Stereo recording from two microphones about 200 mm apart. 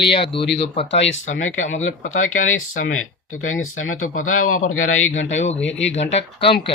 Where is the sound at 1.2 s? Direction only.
40° left (ahead or behind).